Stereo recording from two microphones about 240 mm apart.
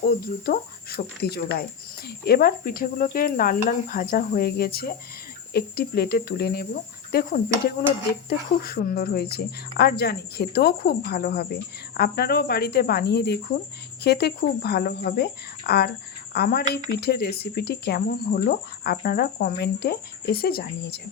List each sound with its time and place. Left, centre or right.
0.0 s speech: left